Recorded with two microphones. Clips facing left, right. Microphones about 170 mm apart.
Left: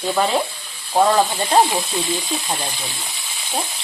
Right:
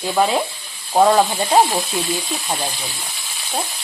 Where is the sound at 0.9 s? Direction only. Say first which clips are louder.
Right 2 dB; 10° right (ahead or behind).